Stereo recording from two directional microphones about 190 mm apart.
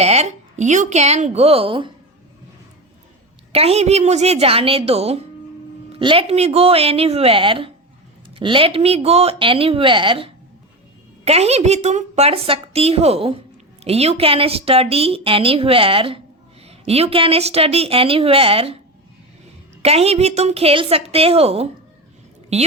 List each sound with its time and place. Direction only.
0.0 s a woman's voice: 35° right (ahead or behind)
3.5 s a woman's voice: 30° right (ahead or behind)
19.8 s a woman's voice: 35° right (ahead or behind)